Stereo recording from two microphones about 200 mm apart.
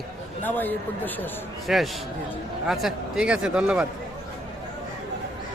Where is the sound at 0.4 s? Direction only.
10° left (ahead or behind).